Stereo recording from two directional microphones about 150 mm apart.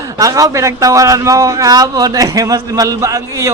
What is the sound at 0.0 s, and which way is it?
A man's voice, 20° right (ahead or behind).